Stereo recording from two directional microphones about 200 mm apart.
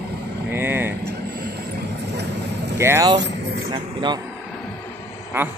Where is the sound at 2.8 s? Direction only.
15° right (ahead or behind).